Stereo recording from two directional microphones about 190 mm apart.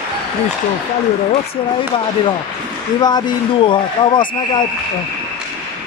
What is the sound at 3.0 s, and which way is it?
Speech, 20° left (ahead or behind).